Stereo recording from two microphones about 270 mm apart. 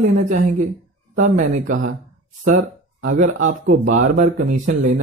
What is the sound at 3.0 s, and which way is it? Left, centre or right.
Speech, right.